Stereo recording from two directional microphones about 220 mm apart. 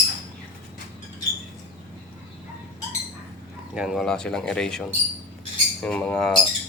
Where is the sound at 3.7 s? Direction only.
Centre (ahead or behind).